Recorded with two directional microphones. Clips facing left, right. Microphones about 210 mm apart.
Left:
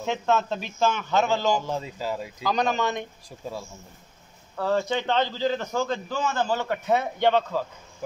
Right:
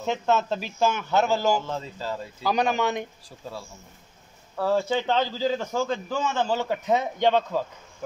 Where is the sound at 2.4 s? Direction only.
10° right (ahead or behind).